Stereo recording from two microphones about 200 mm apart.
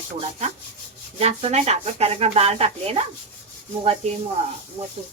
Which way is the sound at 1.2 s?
30° right (ahead or behind).